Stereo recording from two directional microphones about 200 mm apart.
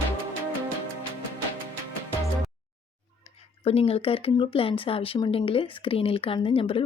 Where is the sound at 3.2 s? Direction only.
30° left (ahead or behind).